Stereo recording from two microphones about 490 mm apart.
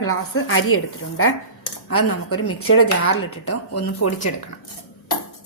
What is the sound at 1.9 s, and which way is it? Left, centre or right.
A woman's voice, left.